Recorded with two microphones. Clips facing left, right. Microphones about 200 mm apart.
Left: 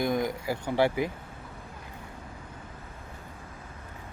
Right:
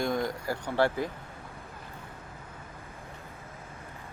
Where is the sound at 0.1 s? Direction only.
20° left (ahead or behind).